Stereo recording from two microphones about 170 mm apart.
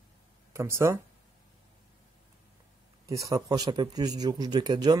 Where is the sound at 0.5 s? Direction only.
15° right (ahead or behind).